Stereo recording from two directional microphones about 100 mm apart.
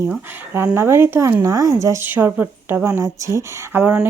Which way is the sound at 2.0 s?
20° right (ahead or behind).